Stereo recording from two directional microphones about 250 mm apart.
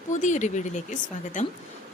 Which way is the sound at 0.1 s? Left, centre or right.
Left.